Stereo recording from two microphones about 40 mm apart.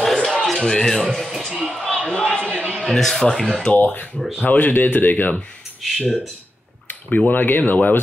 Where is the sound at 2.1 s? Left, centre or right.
Left.